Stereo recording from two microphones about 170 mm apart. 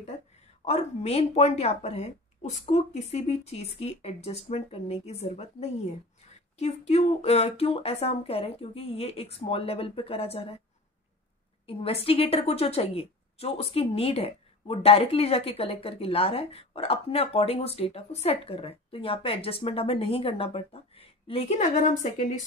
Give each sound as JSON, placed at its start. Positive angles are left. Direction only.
{"t": 0.7, "sound": "a woman's voice", "side_deg": 40}
{"t": 11.6, "sound": "a woman's voice", "side_deg": 35}